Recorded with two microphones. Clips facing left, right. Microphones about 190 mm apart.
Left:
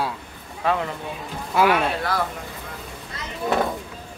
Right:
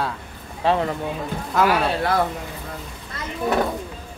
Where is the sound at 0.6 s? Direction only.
30° right (ahead or behind).